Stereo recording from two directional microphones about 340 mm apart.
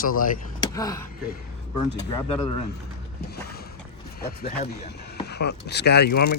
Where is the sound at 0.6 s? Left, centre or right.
Centre.